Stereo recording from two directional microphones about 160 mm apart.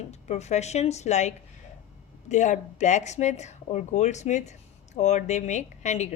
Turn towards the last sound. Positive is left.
turn(degrees=45)  # may be behind; listen again after turning